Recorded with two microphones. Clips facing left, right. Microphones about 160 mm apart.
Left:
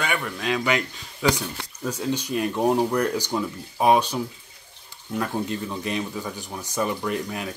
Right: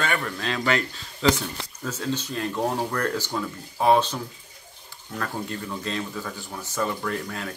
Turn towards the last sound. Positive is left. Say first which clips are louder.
# left 2 dB
turn(degrees=15)  # may be behind; listen again after turning